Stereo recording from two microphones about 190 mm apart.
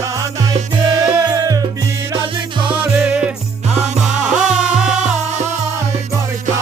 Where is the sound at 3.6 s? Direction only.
35° right (ahead or behind).